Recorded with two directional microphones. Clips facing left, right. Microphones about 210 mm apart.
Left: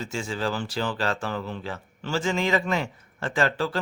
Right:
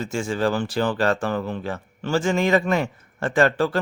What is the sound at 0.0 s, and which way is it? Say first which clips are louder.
Speech: right 6 dB; 50° right (ahead or behind).